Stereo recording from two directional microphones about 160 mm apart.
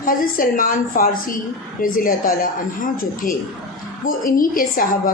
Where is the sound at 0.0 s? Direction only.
60° left (ahead or behind).